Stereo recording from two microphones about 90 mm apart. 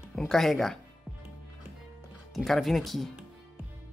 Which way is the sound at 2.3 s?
Centre (ahead or behind).